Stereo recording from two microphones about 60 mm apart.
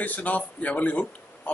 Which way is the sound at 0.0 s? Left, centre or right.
Left.